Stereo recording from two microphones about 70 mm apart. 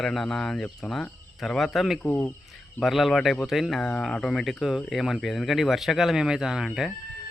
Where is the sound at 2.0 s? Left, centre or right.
Left.